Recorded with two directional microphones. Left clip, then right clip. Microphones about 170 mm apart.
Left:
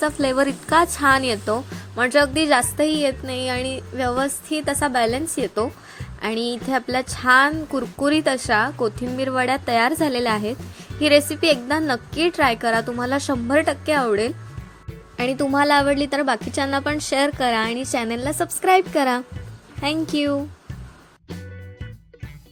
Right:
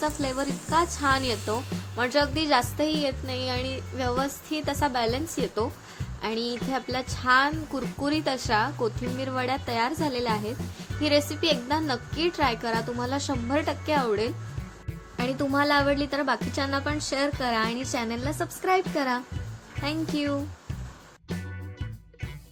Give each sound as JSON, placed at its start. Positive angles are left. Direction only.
{"t": 0.0, "sound": "a woman's voice", "side_deg": 50}